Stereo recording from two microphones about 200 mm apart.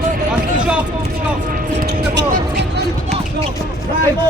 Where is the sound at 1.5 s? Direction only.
50° right (ahead or behind).